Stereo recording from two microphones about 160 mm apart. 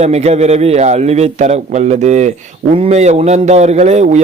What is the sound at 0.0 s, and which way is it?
A man's voice, 45° right (ahead or behind).